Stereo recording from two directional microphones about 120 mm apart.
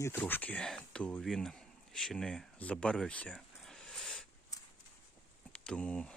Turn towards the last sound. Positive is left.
turn(degrees=10)  # may be behind; listen again after turning